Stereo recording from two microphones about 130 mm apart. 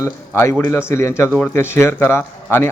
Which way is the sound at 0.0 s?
20° left (ahead or behind).